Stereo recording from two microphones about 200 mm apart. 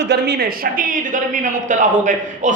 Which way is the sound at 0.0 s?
55° right (ahead or behind).